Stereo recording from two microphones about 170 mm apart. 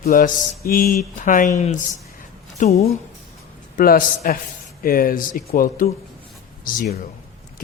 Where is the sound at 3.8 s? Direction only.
55° left (ahead or behind).